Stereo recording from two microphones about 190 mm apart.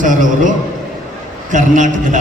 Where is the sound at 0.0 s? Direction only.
45° right (ahead or behind).